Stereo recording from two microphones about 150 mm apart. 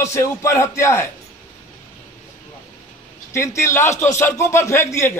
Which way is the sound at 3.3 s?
20° left (ahead or behind).